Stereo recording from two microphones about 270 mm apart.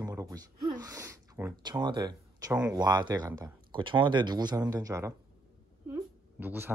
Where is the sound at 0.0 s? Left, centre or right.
Centre.